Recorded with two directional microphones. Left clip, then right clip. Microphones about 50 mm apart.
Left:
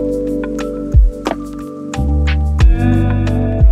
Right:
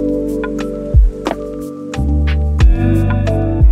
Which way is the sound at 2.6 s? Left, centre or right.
Centre.